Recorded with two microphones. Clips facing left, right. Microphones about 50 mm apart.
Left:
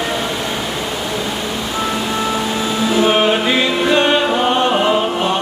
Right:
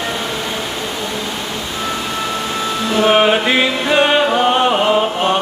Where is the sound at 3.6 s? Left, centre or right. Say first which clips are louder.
Even; centre.